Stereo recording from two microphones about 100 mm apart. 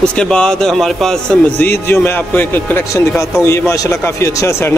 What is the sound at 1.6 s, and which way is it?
A man's voice, 20° left (ahead or behind).